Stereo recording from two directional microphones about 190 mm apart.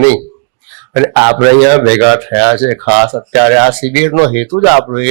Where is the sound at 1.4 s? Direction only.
15° left (ahead or behind).